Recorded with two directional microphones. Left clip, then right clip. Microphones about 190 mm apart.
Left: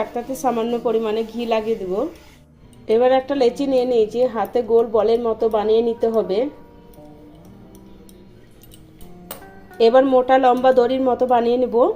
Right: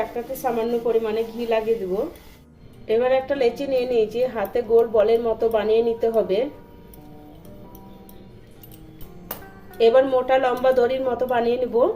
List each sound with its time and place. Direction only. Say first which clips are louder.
0.4 s a woman's voice: left 2 dB; 35° left (ahead or behind)
2.8 s a woman's voice: left 4 dB; 30° left (ahead or behind)
9.7 s a woman's voice: left 3 dB; 25° left (ahead or behind)